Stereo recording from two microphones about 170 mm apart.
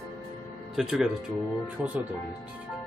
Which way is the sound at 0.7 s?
Centre (ahead or behind).